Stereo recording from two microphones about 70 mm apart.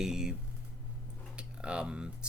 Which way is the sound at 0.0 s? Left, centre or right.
Centre.